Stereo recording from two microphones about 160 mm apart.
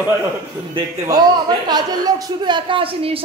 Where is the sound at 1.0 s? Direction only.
25° right (ahead or behind).